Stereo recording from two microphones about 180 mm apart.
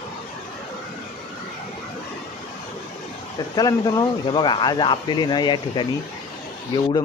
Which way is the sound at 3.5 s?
20° left (ahead or behind).